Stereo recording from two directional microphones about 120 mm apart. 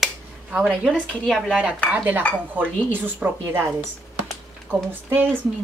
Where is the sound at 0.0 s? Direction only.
Centre (ahead or behind).